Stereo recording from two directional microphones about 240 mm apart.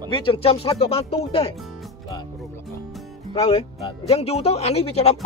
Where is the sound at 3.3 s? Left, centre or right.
Left.